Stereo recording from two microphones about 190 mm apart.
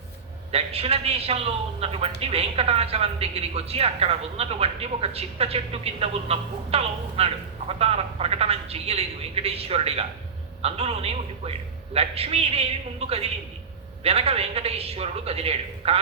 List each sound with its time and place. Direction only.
0.5 s a woman's voice: 30° right (ahead or behind)